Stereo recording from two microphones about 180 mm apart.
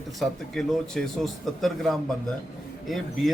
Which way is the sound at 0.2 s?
Centre (ahead or behind).